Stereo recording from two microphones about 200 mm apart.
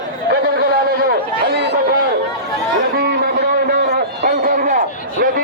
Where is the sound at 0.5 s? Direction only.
50° right (ahead or behind).